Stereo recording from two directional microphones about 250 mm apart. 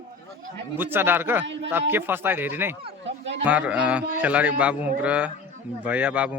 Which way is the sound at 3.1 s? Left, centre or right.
Right.